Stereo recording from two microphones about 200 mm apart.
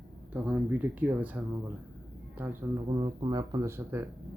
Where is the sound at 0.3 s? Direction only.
5° right (ahead or behind).